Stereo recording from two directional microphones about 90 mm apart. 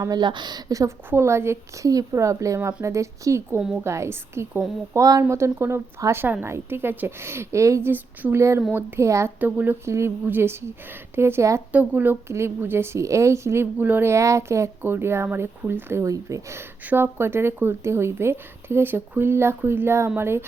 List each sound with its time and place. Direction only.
0.1 s a woman's voice: 55° right (ahead or behind); by 0.9 s 40° right (ahead or behind)
1.1 s speech: 30° right (ahead or behind)
4.9 s speech: 40° right (ahead or behind)
5.3 s speech: 30° right (ahead or behind)
9.4 s speech: 20° right (ahead or behind)
9.8 s speech: 30° right (ahead or behind)
11.7 s speech: 20° right (ahead or behind)